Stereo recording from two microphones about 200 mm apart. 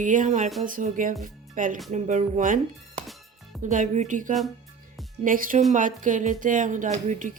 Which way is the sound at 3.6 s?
40° right (ahead or behind).